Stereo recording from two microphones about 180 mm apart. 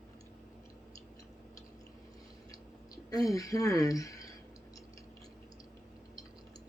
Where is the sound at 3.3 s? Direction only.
20° left (ahead or behind).